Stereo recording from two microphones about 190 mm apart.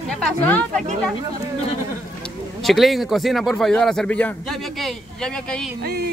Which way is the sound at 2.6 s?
Centre (ahead or behind).